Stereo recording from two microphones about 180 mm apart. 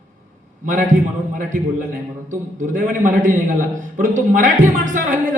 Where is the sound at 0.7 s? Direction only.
45° right (ahead or behind).